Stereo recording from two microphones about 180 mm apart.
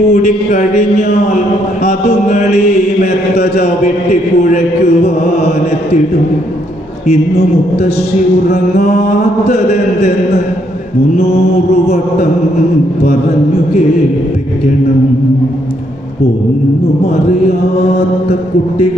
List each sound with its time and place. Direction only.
0.1 s a man's voice: 40° left (ahead or behind)
2.2 s a man's voice: 40° left (ahead or behind)
7.3 s a man's voice: 65° left (ahead or behind)
9.4 s a man's voice: 35° left (ahead or behind)
11.1 s a man's voice: 35° left (ahead or behind)
13.1 s a man's voice: 35° left (ahead or behind)